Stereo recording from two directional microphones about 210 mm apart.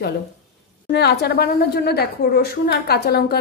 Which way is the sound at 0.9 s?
50° left (ahead or behind).